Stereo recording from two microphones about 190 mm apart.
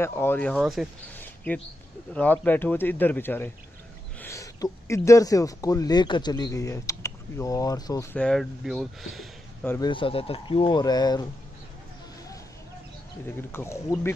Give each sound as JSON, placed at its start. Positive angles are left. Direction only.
{"t": 0.0, "sound": "speech", "side_deg": 10}
{"t": 1.1, "sound": "a sound", "side_deg": 10}
{"t": 2.1, "sound": "speech", "side_deg": 10}
{"t": 9.7, "sound": "speech", "side_deg": 20}
{"t": 13.5, "sound": "speech", "side_deg": 15}